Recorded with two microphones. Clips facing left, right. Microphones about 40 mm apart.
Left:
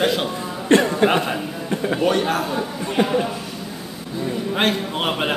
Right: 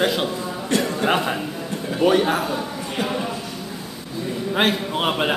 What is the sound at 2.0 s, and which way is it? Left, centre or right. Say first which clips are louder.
Speech: right 4 dB; centre.